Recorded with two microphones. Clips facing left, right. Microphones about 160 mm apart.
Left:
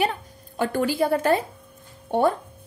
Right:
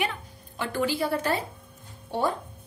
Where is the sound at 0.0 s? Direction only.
40° left (ahead or behind).